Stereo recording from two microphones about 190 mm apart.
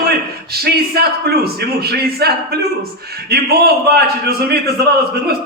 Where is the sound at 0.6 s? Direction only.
55° right (ahead or behind).